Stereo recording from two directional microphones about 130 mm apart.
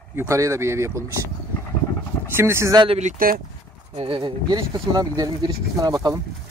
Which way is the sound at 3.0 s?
80° right.